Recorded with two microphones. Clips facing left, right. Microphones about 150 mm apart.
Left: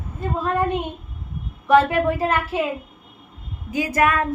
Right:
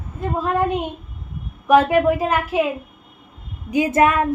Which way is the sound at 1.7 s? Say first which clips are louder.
Right 2 dB; 15° right (ahead or behind).